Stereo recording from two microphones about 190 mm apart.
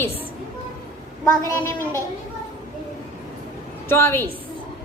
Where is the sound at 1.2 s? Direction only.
20° left (ahead or behind).